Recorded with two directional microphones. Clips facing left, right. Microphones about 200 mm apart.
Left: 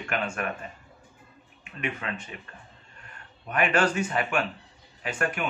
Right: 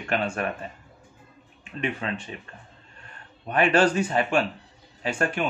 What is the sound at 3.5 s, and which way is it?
Speech, 30° right (ahead or behind).